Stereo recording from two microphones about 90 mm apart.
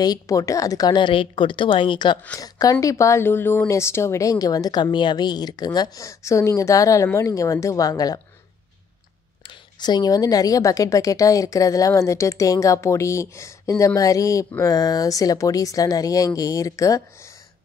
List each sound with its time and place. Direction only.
0.0 s a woman's voice: 45° left (ahead or behind); by 2.1 s 65° left (ahead or behind)
2.3 s a woman's voice: 45° left (ahead or behind)
9.4 s a woman's voice: 60° left (ahead or behind); by 17.4 s 35° left (ahead or behind)